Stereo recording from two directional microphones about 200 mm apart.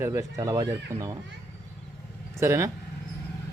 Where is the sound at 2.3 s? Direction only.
15° right (ahead or behind).